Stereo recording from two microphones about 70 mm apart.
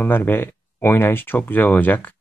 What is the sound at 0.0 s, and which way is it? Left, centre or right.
Speech, left.